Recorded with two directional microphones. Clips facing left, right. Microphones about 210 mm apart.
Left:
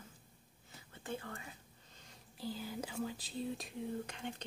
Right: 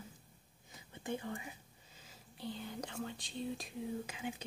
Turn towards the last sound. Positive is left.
turn(degrees=-5)  # may be behind; listen again after turning